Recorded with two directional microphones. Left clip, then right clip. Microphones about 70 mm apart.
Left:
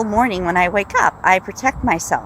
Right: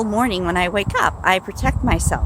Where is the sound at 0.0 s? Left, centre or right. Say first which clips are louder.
Left 3 dB; right.